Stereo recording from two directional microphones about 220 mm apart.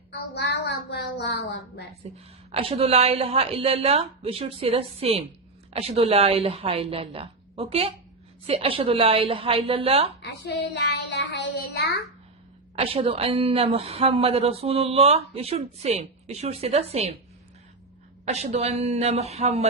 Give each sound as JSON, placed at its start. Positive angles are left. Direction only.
{"t": 0.2, "sound": "a woman's voice", "side_deg": 50}
{"t": 2.1, "sound": "a woman's voice", "side_deg": -25}
{"t": 10.2, "sound": "child singing", "side_deg": 50}
{"t": 12.7, "sound": "a woman's voice", "side_deg": -25}
{"t": 18.3, "sound": "a woman's voice", "side_deg": -30}